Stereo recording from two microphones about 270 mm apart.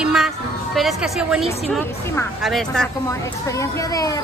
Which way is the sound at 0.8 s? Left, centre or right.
Centre.